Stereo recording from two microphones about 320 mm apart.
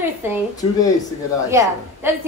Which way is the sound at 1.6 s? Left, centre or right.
Centre.